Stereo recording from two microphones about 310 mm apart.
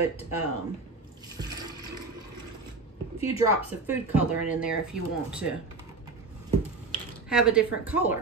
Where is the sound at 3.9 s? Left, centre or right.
Centre.